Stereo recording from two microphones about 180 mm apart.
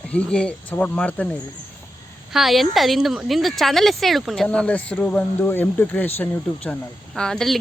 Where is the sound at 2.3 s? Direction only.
Centre (ahead or behind).